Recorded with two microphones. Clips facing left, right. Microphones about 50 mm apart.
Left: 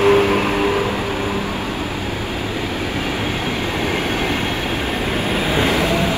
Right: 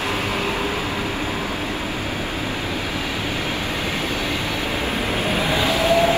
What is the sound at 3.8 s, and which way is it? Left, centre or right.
Train, left.